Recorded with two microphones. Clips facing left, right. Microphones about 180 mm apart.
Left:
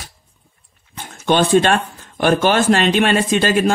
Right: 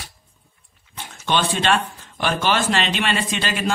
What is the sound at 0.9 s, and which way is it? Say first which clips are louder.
Speech: left 6 dB; 45° left (ahead or behind).